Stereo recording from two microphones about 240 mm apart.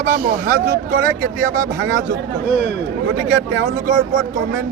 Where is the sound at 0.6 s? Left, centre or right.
Right.